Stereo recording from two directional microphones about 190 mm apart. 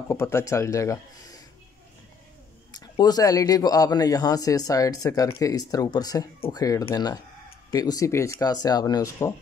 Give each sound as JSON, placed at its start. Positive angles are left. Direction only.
{"t": 0.1, "sound": "speech", "side_deg": 15}
{"t": 2.7, "sound": "speech", "side_deg": 20}